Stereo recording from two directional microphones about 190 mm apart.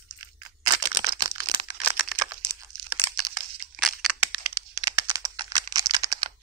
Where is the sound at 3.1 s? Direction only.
15° right (ahead or behind).